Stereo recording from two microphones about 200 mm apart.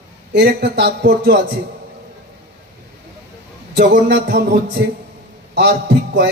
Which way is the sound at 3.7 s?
55° right (ahead or behind).